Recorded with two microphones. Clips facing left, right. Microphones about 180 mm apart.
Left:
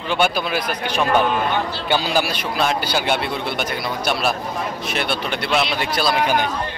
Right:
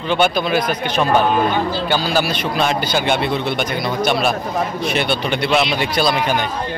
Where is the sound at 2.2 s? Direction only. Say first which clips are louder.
Right 3 dB; 5° left (ahead or behind).